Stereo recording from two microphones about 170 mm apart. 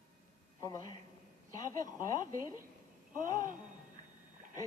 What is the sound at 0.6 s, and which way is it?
A woman's voice, 20° left (ahead or behind).